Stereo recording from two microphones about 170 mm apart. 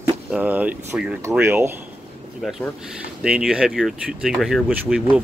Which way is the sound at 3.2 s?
5° right (ahead or behind).